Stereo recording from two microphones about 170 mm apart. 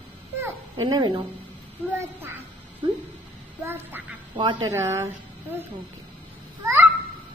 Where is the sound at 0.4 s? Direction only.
25° right (ahead or behind).